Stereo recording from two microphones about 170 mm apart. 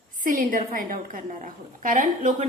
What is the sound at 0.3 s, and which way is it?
A woman's voice, 55° right (ahead or behind).